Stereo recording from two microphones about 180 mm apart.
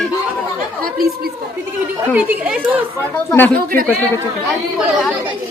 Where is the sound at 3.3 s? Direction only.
10° left (ahead or behind).